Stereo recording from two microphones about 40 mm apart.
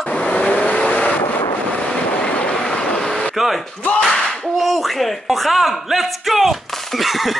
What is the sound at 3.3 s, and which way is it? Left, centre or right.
Speech, centre.